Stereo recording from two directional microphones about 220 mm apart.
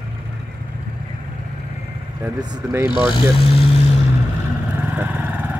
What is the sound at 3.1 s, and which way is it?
Speech, 25° left (ahead or behind).